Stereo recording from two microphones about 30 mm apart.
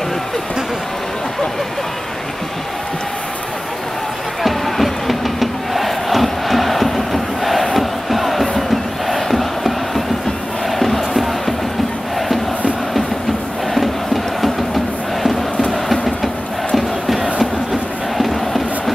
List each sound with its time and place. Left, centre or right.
4.4 s crowd: centre
10.7 s music: centre
13.7 s music: centre
18.1 s crowd: centre